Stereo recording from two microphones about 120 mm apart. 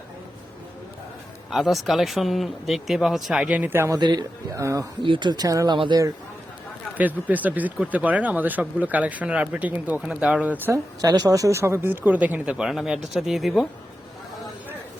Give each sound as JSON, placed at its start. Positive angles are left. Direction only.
{"t": 1.5, "sound": "speech", "side_deg": 0}
{"t": 3.9, "sound": "speech", "side_deg": -35}
{"t": 5.0, "sound": "speech", "side_deg": -40}
{"t": 5.7, "sound": "speech", "side_deg": -40}
{"t": 6.9, "sound": "speech", "side_deg": -15}
{"t": 11.0, "sound": "speech", "side_deg": -30}